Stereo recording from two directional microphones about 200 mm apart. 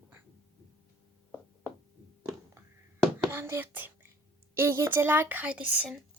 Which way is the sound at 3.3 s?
10° right (ahead or behind).